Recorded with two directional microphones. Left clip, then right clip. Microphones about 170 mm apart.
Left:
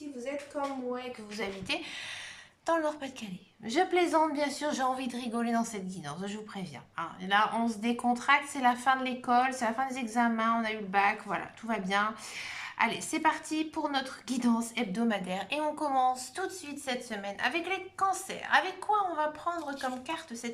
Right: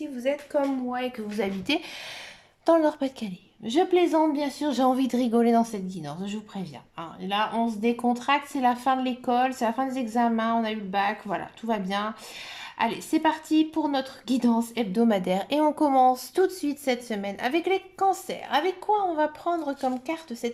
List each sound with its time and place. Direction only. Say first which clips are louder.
0.3 s a woman's voice: right 11 dB; 60° right (ahead or behind)
1.7 s a woman's voice: right 6 dB; 35° right (ahead or behind)
3.6 s a woman's voice: right 5 dB; 20° right (ahead or behind)